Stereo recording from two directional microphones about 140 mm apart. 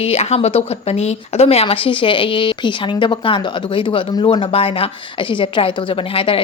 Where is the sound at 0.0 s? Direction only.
50° left (ahead or behind).